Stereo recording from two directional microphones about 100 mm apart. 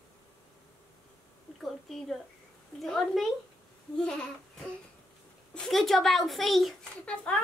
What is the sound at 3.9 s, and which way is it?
Babbling, 10° left (ahead or behind).